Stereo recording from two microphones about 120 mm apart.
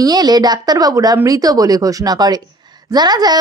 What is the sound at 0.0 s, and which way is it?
A woman's voice, 35° right (ahead or behind).